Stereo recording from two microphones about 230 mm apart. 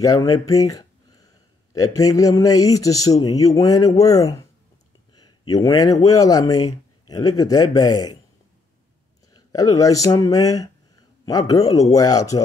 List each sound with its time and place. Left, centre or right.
0.0 s speech: centre
5.5 s a man's voice: centre
9.3 s speech: centre